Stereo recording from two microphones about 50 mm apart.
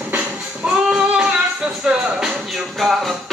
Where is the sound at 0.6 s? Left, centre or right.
Right.